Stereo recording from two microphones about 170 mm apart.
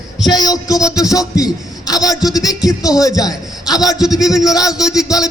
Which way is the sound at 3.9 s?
Centre (ahead or behind).